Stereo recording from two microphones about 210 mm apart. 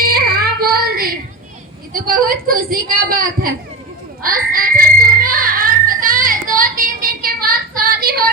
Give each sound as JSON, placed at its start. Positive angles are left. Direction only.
{"t": 0.0, "sound": "a sound", "side_deg": -45}
{"t": 1.9, "sound": "a woman's voice", "side_deg": -45}
{"t": 4.2, "sound": "frog", "side_deg": -40}